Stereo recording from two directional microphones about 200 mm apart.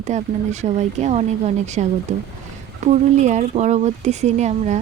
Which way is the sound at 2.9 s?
35° right (ahead or behind).